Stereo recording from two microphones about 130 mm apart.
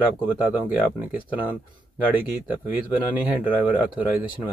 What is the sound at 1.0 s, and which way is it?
Speech, 10° right (ahead or behind).